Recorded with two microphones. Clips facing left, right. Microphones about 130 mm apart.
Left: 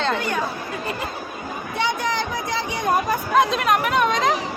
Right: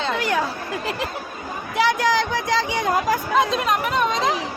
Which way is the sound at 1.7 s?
90° right.